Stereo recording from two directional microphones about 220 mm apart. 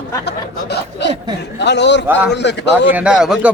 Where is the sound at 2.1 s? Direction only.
5° right (ahead or behind).